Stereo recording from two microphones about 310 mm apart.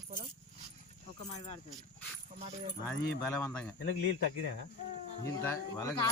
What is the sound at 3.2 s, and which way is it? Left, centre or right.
Speech, centre.